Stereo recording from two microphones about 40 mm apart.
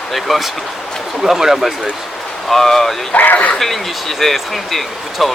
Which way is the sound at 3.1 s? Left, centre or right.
Left.